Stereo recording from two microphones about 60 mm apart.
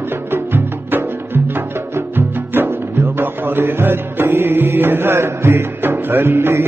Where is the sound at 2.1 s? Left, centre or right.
Right.